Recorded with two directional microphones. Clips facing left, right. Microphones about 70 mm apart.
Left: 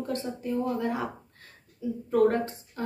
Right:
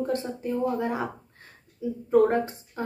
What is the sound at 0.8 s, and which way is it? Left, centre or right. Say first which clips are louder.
Speech: right 1 dB; right.